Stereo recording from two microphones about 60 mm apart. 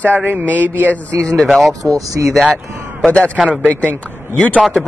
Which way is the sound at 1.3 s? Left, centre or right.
Centre.